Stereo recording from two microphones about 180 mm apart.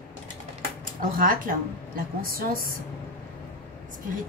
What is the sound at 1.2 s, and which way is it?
A woman's voice, 50° right (ahead or behind).